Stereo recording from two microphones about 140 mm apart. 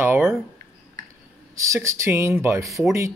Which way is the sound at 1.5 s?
20° right (ahead or behind).